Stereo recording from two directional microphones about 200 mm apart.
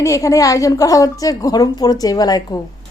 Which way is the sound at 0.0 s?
15° left (ahead or behind).